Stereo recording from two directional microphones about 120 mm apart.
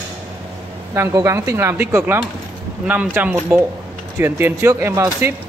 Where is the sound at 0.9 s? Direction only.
20° right (ahead or behind).